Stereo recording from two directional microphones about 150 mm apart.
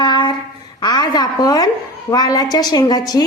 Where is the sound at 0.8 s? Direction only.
25° left (ahead or behind).